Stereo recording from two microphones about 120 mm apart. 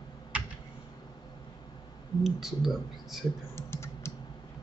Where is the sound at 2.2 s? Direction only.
Centre (ahead or behind).